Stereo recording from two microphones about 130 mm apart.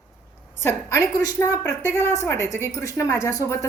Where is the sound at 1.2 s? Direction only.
25° left (ahead or behind).